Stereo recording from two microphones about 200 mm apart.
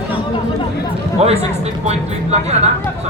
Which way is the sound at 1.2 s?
30° right (ahead or behind).